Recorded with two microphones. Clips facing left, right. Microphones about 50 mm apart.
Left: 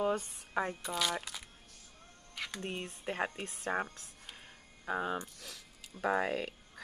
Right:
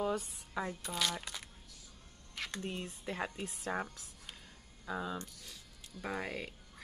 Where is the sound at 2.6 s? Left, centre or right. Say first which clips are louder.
Left 2 dB; left.